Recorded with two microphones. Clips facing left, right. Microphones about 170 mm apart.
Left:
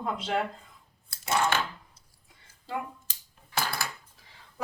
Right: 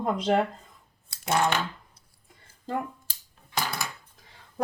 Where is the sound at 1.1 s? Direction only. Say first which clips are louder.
Right 2 dB; 15° right (ahead or behind).